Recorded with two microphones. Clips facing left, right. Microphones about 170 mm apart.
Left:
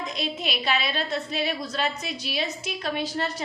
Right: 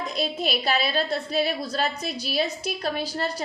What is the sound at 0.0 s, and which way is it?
A woman's voice, 35° right (ahead or behind).